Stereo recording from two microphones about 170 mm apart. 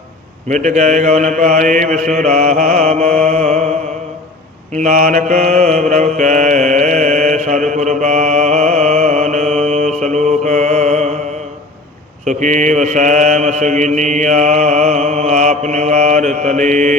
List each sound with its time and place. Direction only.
0.4 s mantra: 45° right (ahead or behind)
4.7 s mantra: 45° right (ahead or behind)
12.2 s mantra: 45° right (ahead or behind)